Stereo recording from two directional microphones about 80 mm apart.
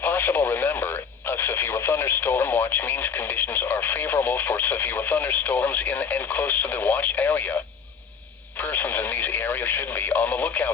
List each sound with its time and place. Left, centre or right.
0.0 s speech: left
8.5 s speech: left